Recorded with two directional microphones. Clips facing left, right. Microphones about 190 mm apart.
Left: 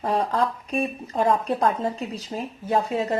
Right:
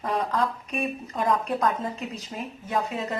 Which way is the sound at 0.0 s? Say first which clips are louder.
Left 3 dB; 30° left (ahead or behind).